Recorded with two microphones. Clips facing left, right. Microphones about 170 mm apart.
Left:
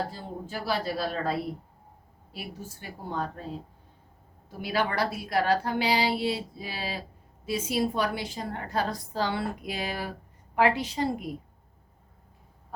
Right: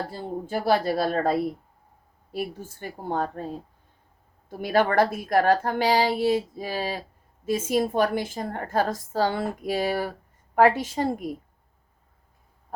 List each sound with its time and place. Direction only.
0.1 s a woman's voice: 50° right (ahead or behind)
3.1 s a woman's voice: 50° right (ahead or behind)
4.4 s a woman's voice: 50° right (ahead or behind)